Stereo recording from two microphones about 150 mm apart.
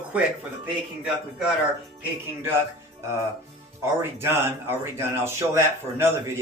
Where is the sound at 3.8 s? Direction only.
15° right (ahead or behind).